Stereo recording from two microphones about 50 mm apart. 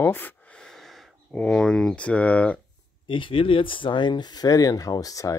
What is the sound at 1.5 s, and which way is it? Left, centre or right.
Speech, centre.